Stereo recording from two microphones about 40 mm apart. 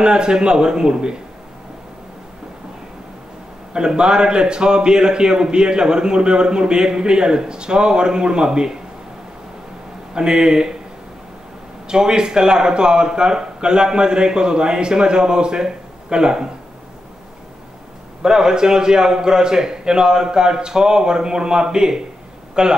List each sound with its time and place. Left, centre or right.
0.0 s a man's voice: centre
3.7 s a man's voice: centre
10.1 s a man's voice: centre
11.9 s a man's voice: centre
18.2 s a man's voice: centre